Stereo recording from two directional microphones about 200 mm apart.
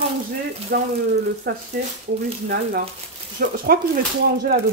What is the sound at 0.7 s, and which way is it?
Speech, 50° right (ahead or behind).